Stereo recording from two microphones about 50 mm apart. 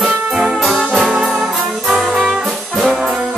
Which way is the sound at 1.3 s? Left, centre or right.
Centre.